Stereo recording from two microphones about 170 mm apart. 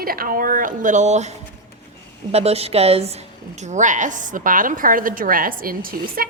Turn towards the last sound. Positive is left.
turn(degrees=-55)  # may be behind; listen again after turning